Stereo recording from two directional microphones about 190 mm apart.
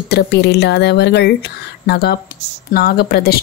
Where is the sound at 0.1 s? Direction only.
60° left (ahead or behind).